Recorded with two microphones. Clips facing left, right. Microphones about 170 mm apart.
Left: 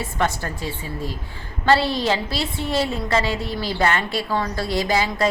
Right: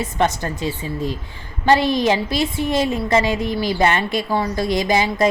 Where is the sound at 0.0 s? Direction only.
20° right (ahead or behind).